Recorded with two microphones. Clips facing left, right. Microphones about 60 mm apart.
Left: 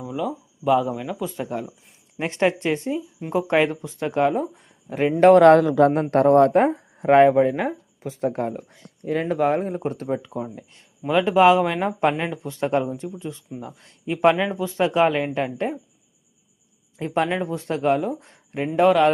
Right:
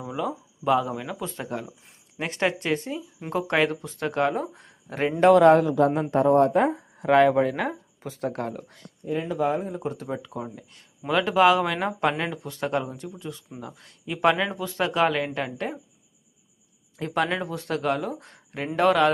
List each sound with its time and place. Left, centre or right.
0.1 s speech: centre
1.5 s speech: centre
3.8 s speech: centre
5.4 s speech: left
6.1 s speech: left
6.5 s speech: left; by 8.9 s centre
9.2 s speech: left
9.8 s speech: left
17.0 s speech: left